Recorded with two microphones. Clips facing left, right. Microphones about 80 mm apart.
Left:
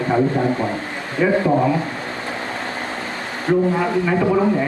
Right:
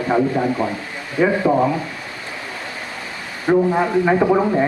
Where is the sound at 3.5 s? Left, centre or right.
Right.